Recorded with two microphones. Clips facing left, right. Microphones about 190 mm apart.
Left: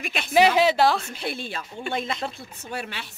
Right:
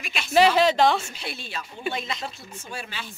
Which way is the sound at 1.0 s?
55° left (ahead or behind).